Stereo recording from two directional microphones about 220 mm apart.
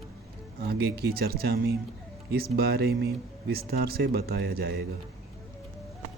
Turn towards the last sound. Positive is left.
turn(degrees=-45)  # may be behind; listen again after turning